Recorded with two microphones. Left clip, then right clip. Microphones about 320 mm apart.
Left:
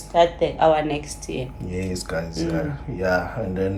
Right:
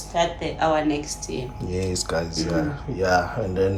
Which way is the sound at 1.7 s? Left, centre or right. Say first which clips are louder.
Right 2 dB; centre.